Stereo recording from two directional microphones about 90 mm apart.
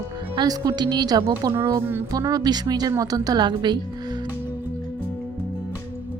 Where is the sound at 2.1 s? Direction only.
45° right (ahead or behind).